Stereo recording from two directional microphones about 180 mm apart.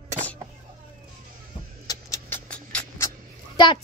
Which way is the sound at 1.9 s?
15° left (ahead or behind).